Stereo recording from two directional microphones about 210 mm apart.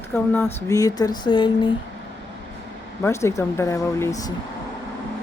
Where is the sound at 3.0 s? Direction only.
15° left (ahead or behind).